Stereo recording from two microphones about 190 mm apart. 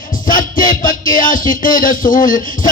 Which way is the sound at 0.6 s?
45° left (ahead or behind).